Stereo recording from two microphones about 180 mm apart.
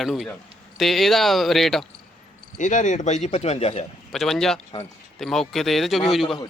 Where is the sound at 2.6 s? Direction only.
45° left (ahead or behind).